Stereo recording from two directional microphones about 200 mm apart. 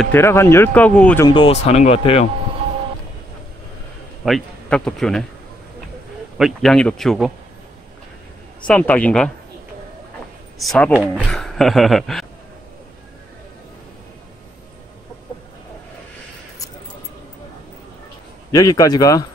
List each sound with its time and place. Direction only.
0.0 s speech: 10° left (ahead or behind)
1.2 s speech: 25° left (ahead or behind)
4.2 s speech: 5° left (ahead or behind)
6.3 s speech: centre (ahead or behind)
8.6 s speech: 5° left (ahead or behind)
10.6 s speech: centre (ahead or behind)
18.5 s speech: 20° left (ahead or behind)